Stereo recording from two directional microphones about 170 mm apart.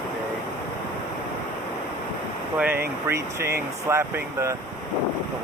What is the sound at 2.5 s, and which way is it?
Speech, 10° right (ahead or behind).